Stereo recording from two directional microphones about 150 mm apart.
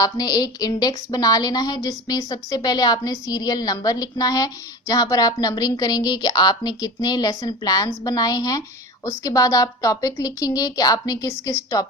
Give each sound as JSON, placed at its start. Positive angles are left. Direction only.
{"t": 0.0, "sound": "a woman's voice", "side_deg": 25}